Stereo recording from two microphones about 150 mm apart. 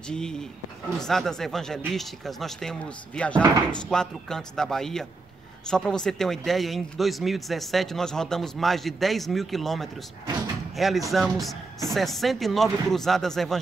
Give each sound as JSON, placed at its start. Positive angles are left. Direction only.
{"t": 0.1, "sound": "speech", "side_deg": 5}